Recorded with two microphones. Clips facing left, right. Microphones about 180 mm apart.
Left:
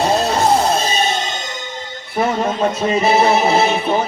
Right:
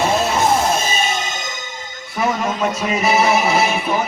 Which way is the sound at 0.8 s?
35° left (ahead or behind).